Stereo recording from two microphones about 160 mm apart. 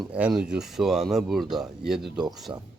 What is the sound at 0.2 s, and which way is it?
Speech, 5° right (ahead or behind).